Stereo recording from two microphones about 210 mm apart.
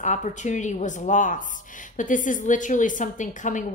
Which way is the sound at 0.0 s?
35° left (ahead or behind).